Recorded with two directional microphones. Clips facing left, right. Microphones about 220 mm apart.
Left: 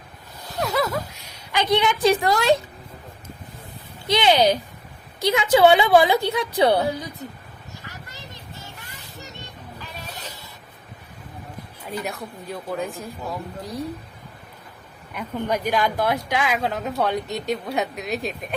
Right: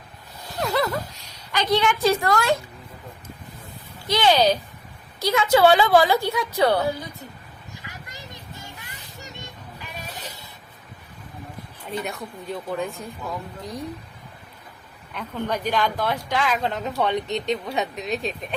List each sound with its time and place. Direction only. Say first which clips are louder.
0.6 s a sound: even; centre (ahead or behind)
1.5 s a woman's voice: left 1 dB; 15° left (ahead or behind)
4.1 s a woman's voice: left 1 dB; 20° left (ahead or behind)
7.9 s vehicle: right 1 dB; 15° right (ahead or behind)
12.0 s a woman's voice: even; centre (ahead or behind)
15.1 s a woman's voice: left 2 dB; 10° left (ahead or behind)